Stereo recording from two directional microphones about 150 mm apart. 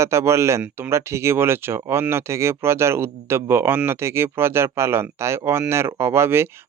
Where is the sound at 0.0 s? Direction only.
15° right (ahead or behind).